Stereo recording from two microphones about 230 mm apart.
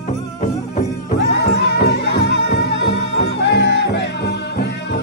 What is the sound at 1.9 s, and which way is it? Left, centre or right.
Music, left.